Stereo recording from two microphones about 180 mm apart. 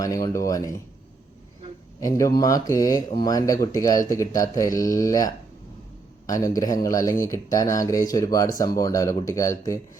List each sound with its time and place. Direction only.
0.0 s speech: 20° left (ahead or behind)
2.0 s speech: 15° left (ahead or behind)